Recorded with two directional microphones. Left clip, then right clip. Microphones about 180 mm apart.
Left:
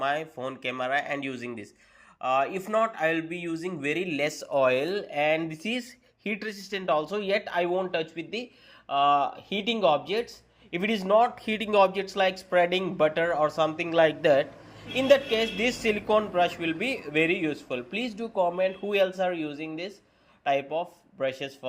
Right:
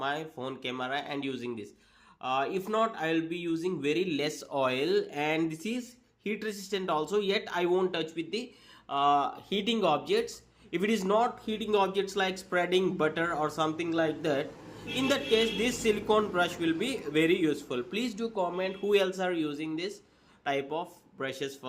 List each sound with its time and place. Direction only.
0.0 s a man's voice: 10° left (ahead or behind)
11.4 s a man's voice: 25° left (ahead or behind); by 21.7 s 5° left (ahead or behind)